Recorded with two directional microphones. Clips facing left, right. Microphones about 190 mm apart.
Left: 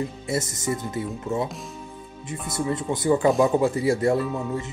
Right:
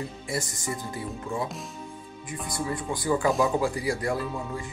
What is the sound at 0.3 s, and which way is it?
Speech, 25° left (ahead or behind).